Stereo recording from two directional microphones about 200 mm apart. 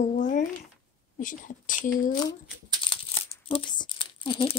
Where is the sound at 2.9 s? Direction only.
30° left (ahead or behind).